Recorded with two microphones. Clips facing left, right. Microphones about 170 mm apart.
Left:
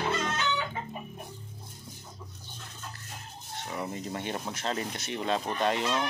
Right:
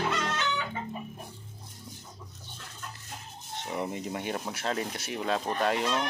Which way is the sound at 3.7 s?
15° right (ahead or behind).